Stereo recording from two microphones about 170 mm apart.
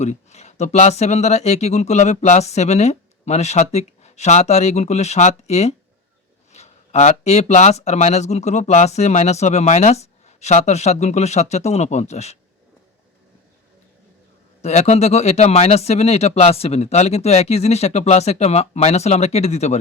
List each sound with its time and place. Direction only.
0.0 s speech: 40° left (ahead or behind)
14.6 s speech: 40° left (ahead or behind)